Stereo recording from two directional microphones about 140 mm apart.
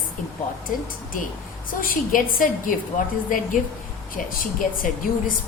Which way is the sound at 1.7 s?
80° left.